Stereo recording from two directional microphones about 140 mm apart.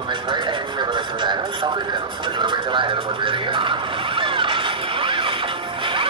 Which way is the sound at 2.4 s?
35° right (ahead or behind).